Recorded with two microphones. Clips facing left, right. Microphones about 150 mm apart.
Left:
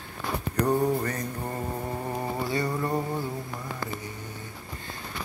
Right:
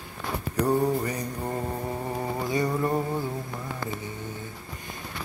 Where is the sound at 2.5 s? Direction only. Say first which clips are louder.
Right 4 dB; 20° right (ahead or behind).